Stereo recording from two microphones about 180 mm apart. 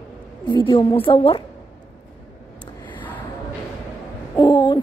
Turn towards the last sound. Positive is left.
turn(degrees=25)  # may be behind; listen again after turning